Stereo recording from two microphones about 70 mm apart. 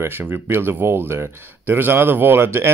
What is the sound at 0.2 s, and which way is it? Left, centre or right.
Speech, right.